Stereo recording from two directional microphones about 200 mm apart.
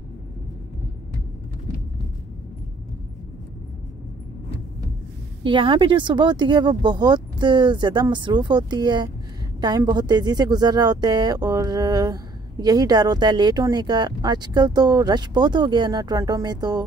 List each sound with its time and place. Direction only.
5.4 s a woman's voice: 25° right (ahead or behind)